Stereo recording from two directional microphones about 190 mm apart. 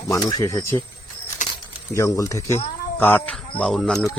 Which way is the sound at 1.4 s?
40° left (ahead or behind).